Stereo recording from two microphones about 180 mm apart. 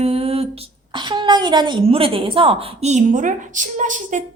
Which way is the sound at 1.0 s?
25° right (ahead or behind).